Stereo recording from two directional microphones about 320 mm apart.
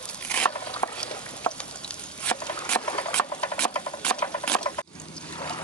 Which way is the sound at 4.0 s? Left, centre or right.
Centre.